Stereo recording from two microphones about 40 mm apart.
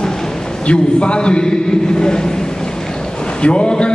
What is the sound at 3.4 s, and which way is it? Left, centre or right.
Speech, left.